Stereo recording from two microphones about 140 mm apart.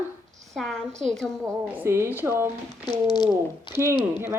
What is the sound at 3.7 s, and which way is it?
Speech, 35° left (ahead or behind).